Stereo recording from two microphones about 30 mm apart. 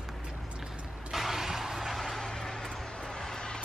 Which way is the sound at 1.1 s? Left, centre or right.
Centre.